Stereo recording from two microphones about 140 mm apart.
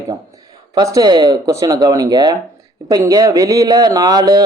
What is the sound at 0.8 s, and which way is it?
Speech, 25° right (ahead or behind).